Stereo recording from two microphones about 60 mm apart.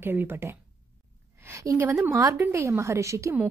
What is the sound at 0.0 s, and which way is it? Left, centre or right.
Speech, right.